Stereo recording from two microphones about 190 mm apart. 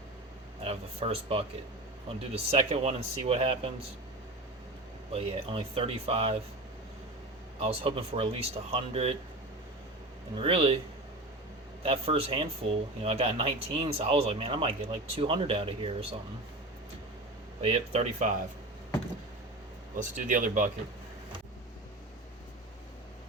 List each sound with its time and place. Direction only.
0.6 s speech: 30° right (ahead or behind)
5.1 s speech: 30° right (ahead or behind)
7.6 s speech: 30° right (ahead or behind)
10.3 s speech: 30° right (ahead or behind)
11.8 s speech: 30° right (ahead or behind)
17.6 s speech: 30° right (ahead or behind)
20.0 s speech: 40° right (ahead or behind)